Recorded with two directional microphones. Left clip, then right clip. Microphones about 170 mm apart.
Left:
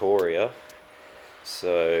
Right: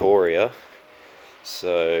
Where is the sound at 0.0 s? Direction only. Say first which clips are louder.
Right 5 dB; 50° right (ahead or behind).